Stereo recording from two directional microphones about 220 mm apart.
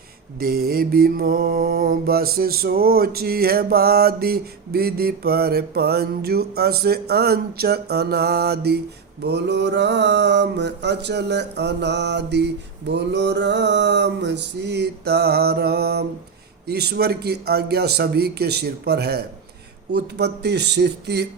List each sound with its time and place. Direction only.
0.3 s mantra: 45° right (ahead or behind)